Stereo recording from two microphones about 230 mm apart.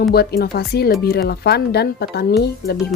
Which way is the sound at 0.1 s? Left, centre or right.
Left.